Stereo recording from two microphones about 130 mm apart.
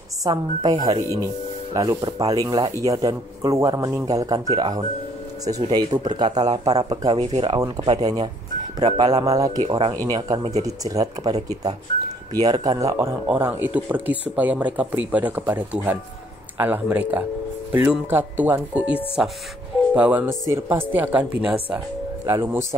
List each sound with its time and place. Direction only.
0.2 s speech: 30° right (ahead or behind)
1.8 s speech: 30° right (ahead or behind)
9.7 s speech: 45° right (ahead or behind)
10.1 s speech: 30° right (ahead or behind)
13.3 s speech: 15° right (ahead or behind)
22.2 s speech: 20° right (ahead or behind)